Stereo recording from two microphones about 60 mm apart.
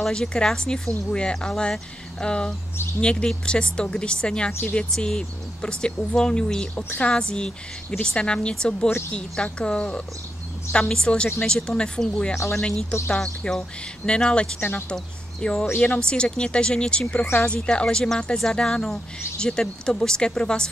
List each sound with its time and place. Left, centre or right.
0.1 s speech: centre
4.5 s speech: left
4.7 s speech: centre
6.7 s speech: left
7.0 s speech: centre
14.6 s speech: left
15.4 s speech: centre